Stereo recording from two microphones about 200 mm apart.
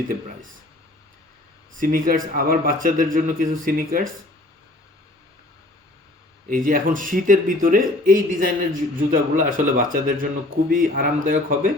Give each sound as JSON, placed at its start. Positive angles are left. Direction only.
{"t": 1.8, "sound": "speech", "side_deg": -45}
{"t": 6.5, "sound": "speech", "side_deg": -45}